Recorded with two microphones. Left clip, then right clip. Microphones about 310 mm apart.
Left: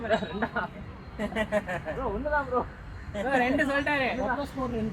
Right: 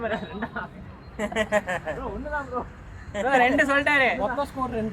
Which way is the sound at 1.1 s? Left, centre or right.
Right.